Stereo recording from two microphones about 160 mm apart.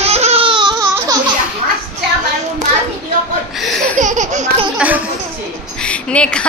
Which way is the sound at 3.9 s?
50° right (ahead or behind).